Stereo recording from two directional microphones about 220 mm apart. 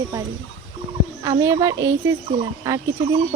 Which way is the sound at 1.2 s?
15° right (ahead or behind).